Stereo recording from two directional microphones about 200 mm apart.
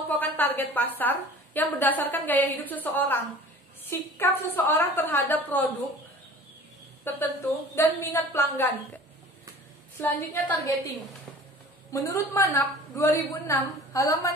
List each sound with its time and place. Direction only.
0.2 s a woman's voice: 10° left (ahead or behind)
7.1 s a woman's voice: 10° left (ahead or behind)
9.9 s a woman's voice: 10° left (ahead or behind)
11.9 s a woman's voice: 15° left (ahead or behind)